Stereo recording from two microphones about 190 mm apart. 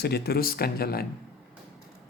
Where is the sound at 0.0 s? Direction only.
55° left (ahead or behind).